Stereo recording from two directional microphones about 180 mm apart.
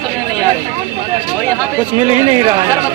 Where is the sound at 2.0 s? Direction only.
30° right (ahead or behind).